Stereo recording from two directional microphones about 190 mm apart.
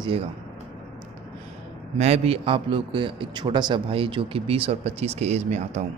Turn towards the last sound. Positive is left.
turn(degrees=-35)  # may be behind; listen again after turning